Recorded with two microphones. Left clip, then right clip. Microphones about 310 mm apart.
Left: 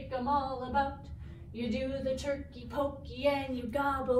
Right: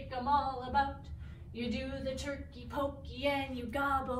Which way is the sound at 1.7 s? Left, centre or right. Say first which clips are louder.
Left 5 dB; centre.